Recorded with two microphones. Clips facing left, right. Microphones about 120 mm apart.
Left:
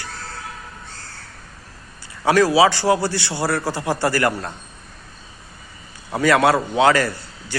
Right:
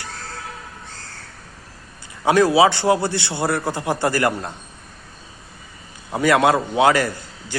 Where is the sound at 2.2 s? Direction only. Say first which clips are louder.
Even; 20° right (ahead or behind).